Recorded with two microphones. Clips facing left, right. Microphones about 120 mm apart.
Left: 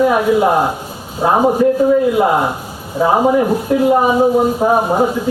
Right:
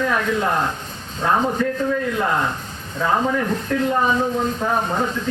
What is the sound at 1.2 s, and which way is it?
A man's voice, 30° left (ahead or behind).